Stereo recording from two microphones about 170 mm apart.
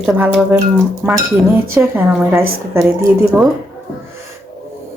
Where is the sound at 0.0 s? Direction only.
5° right (ahead or behind).